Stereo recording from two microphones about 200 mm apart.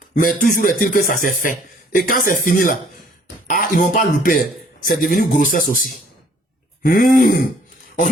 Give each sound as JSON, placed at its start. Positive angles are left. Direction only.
{"t": 0.1, "sound": "speech", "side_deg": 45}
{"t": 6.8, "sound": "speech", "side_deg": 45}